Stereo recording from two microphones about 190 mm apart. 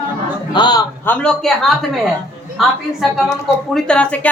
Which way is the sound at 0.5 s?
20° left (ahead or behind).